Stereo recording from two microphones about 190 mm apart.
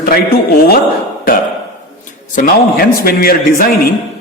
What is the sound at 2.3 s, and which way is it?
A man's voice, 45° left (ahead or behind).